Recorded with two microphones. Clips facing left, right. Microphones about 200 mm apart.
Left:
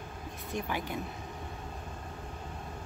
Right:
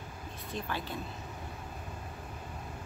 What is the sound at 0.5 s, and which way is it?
Speech, 15° left (ahead or behind).